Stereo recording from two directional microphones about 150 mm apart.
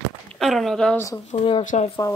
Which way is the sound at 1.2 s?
40° left (ahead or behind).